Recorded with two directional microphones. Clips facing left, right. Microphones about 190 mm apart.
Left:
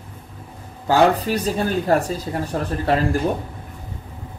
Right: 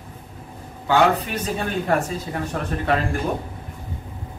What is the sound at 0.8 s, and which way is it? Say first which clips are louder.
Speech: left 2 dB; 35° left (ahead or behind).